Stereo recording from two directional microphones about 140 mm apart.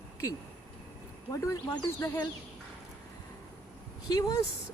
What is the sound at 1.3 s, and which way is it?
Speech, 20° left (ahead or behind).